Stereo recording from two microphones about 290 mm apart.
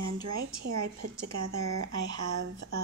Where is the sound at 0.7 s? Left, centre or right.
Right.